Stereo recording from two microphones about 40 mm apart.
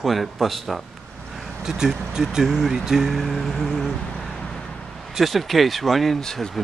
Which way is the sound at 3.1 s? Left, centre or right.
Centre.